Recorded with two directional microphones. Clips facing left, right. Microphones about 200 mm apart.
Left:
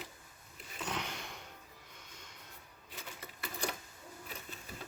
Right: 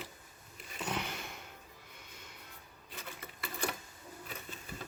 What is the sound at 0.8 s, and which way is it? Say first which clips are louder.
Sniff: right 2 dB; 10° right (ahead or behind).